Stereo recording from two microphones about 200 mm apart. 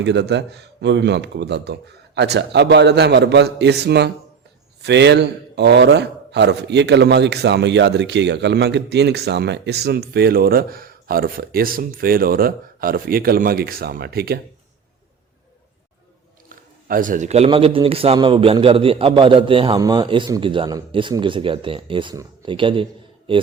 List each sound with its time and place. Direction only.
0.0 s a man's voice: 60° right (ahead or behind)
16.9 s a man's voice: 40° right (ahead or behind); by 23.4 s 25° right (ahead or behind)